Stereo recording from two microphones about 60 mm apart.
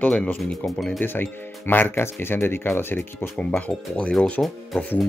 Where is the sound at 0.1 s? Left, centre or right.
Centre.